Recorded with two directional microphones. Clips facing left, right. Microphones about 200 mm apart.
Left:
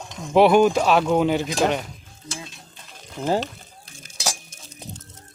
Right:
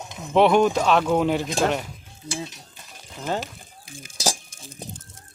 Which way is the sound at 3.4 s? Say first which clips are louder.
Left 4 dB; 10° right (ahead or behind).